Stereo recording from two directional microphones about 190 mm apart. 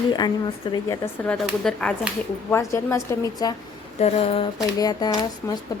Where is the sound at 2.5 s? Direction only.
15° left (ahead or behind).